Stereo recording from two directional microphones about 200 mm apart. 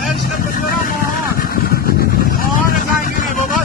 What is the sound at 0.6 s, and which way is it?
Vehicle, 45° left (ahead or behind).